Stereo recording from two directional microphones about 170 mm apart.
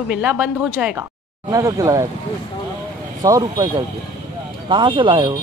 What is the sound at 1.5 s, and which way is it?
Speech, 20° right (ahead or behind).